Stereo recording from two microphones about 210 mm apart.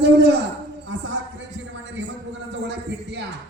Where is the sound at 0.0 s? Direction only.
50° right (ahead or behind).